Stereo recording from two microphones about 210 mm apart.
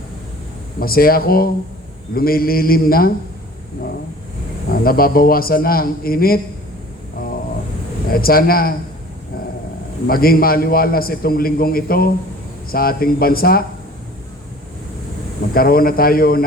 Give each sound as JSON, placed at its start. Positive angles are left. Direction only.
{"t": 0.8, "sound": "a man's voice", "side_deg": 45}
{"t": 4.7, "sound": "a man's voice", "side_deg": 45}
{"t": 8.1, "sound": "a man's voice", "side_deg": 45}
{"t": 10.1, "sound": "a man's voice", "side_deg": 45}
{"t": 15.5, "sound": "a man's voice", "side_deg": 45}